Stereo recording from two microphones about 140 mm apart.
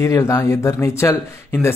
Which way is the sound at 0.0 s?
20° left (ahead or behind).